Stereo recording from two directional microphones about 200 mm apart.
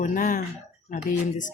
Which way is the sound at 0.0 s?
40° left (ahead or behind).